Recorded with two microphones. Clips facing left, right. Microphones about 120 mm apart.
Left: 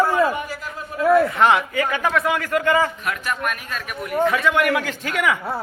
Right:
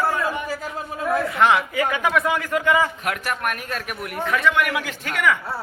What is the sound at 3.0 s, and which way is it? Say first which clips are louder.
Speech: even; 70° right (ahead or behind).